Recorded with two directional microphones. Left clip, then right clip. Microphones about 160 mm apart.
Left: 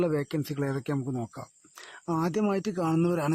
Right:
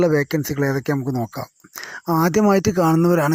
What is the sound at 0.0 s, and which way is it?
Speech, 35° right (ahead or behind).